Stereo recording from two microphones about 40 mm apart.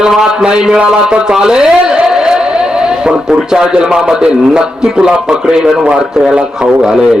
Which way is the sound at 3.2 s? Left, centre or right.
Centre.